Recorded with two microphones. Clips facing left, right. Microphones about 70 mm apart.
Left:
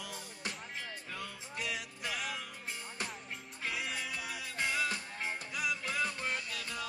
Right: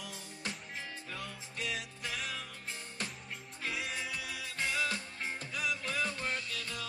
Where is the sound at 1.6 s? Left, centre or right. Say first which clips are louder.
Even; centre.